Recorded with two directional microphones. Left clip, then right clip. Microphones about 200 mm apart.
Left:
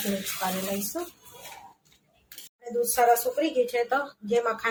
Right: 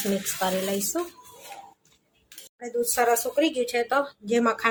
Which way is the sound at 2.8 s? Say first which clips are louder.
Left 2 dB; 45° right (ahead or behind).